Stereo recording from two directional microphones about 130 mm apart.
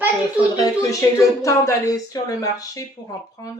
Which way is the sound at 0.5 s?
30° left (ahead or behind).